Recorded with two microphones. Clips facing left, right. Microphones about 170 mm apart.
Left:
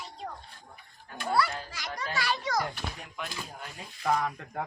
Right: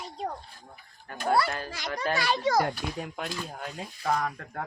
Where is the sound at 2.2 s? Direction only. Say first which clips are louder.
Right 5 dB; 25° right (ahead or behind).